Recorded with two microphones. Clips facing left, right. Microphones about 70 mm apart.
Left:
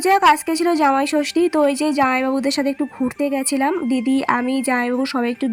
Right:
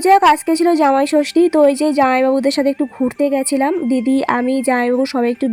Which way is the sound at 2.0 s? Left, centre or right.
Right.